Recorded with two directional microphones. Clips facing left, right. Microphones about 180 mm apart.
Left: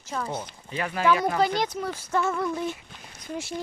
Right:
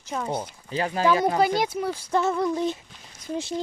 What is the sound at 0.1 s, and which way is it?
Speech, 15° right (ahead or behind).